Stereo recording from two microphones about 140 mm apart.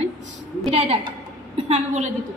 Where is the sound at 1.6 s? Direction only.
55° right (ahead or behind).